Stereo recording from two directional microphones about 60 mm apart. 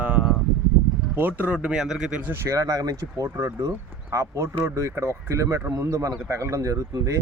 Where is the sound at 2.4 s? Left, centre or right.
Right.